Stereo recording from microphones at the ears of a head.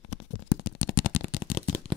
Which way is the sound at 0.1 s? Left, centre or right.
Left.